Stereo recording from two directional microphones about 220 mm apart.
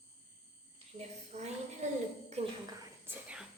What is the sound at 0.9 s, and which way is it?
A woman's voice, 30° right (ahead or behind).